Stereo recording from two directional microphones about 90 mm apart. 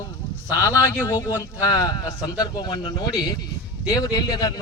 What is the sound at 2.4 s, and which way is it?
Speech, 50° left (ahead or behind).